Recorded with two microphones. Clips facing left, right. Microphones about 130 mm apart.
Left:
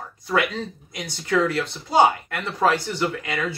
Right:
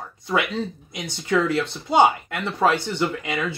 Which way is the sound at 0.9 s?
20° right (ahead or behind).